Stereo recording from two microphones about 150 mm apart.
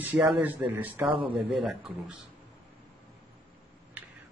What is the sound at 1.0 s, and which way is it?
Speech, 35° right (ahead or behind).